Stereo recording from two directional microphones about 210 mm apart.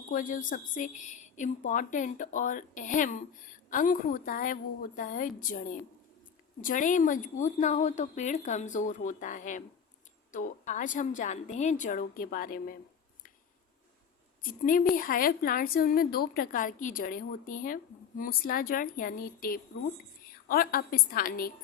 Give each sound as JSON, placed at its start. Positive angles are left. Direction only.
{"t": 0.1, "sound": "a woman's voice", "side_deg": 40}
{"t": 14.6, "sound": "a woman's voice", "side_deg": 40}